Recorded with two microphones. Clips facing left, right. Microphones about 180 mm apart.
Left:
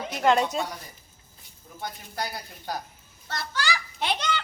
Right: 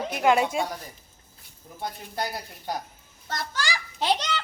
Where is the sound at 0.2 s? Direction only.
10° right (ahead or behind).